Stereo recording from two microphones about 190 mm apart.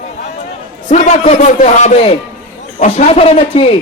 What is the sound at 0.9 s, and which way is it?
A man's voice, 40° left (ahead or behind).